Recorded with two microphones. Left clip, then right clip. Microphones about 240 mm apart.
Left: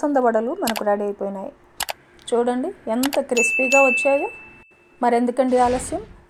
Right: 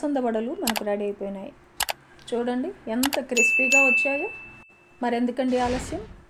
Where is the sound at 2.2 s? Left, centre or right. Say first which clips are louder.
Left 7 dB; left.